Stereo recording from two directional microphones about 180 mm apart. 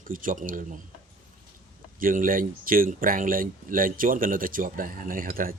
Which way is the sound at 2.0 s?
50° right (ahead or behind).